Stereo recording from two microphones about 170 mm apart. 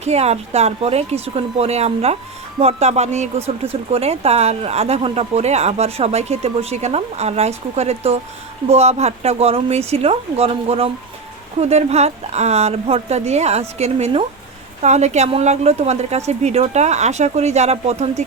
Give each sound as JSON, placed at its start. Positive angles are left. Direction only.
{"t": 0.0, "sound": "speech", "side_deg": -40}